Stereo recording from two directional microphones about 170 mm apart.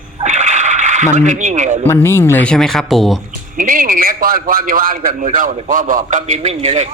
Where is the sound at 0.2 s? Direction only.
45° right (ahead or behind).